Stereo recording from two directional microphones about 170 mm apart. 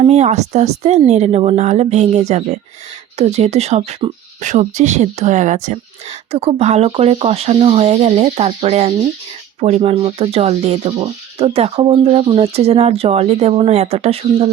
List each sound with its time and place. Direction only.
0.0 s speech: 40° right (ahead or behind)